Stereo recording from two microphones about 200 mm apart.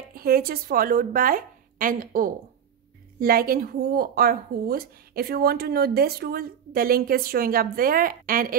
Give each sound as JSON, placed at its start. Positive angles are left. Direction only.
{"t": 0.1, "sound": "speech", "side_deg": -50}